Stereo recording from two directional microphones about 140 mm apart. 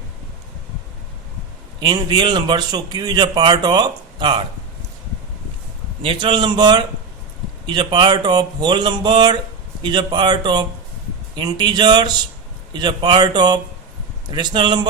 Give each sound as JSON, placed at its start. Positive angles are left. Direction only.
{"t": 1.8, "sound": "a man's voice", "side_deg": -35}
{"t": 6.0, "sound": "a man's voice", "side_deg": -40}